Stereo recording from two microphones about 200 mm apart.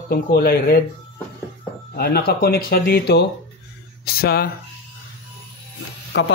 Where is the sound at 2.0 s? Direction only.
50° left (ahead or behind).